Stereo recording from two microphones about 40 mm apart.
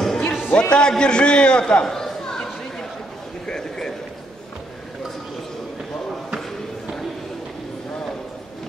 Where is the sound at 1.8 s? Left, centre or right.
Centre.